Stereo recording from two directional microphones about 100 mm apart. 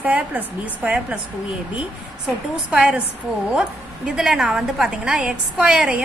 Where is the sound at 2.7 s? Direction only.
10° right (ahead or behind).